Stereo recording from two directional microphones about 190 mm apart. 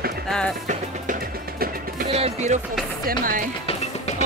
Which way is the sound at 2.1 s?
35° right (ahead or behind).